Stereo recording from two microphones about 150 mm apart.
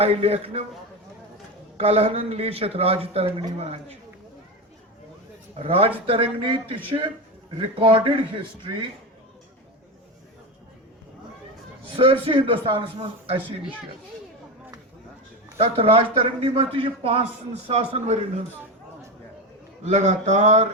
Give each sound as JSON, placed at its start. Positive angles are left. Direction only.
{"t": 0.0, "sound": "speech", "side_deg": -40}
{"t": 1.8, "sound": "a man's voice", "side_deg": -40}
{"t": 5.5, "sound": "a man's voice", "side_deg": -40}
{"t": 11.9, "sound": "a man's voice", "side_deg": -40}
{"t": 15.5, "sound": "a man's voice", "side_deg": -40}
{"t": 19.8, "sound": "speech", "side_deg": -50}